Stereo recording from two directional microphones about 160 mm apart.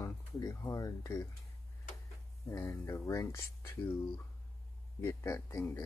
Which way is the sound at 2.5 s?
15° left (ahead or behind).